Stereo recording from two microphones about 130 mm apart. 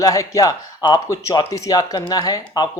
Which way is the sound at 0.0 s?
25° left (ahead or behind).